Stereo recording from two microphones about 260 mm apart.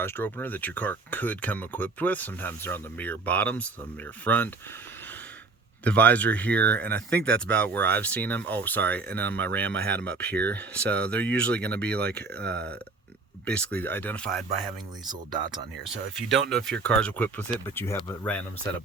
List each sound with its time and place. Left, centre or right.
0.0 s speech: centre
5.8 s speech: centre
9.8 s speech: right
10.1 s speech: centre
13.4 s speech: centre
15.0 s speech: centre
15.8 s speech: centre